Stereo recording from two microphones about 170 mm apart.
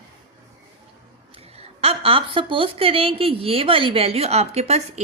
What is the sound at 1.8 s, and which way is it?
A woman's voice, 35° right (ahead or behind).